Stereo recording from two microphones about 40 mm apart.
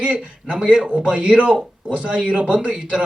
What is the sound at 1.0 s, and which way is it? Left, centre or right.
A man's voice, right.